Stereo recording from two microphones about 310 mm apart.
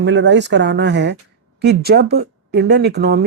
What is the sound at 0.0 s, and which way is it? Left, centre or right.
Speech, right.